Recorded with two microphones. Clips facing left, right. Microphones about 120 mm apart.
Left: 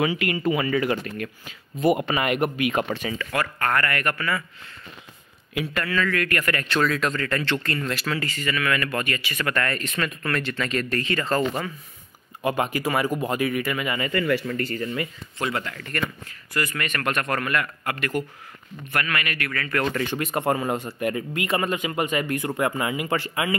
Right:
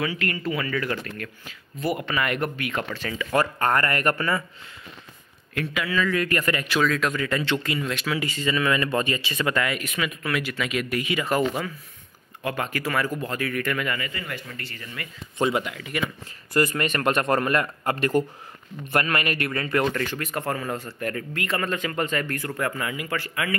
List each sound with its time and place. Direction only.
0.0 s speech: 15° left (ahead or behind)
3.3 s speech: 25° right (ahead or behind)
5.7 s speech: 10° right (ahead or behind)
6.7 s speech: centre (ahead or behind)
7.2 s speech: 15° right (ahead or behind)
12.4 s speech: 15° left (ahead or behind)
14.1 s speech: 80° left
14.6 s speech: 45° left (ahead or behind)
15.3 s speech: 20° right (ahead or behind)
16.5 s a man's voice: 30° right (ahead or behind)
20.1 s speech: 20° left (ahead or behind)